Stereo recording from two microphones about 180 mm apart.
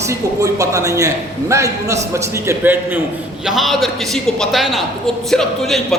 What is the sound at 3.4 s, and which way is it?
Speech, centre (ahead or behind).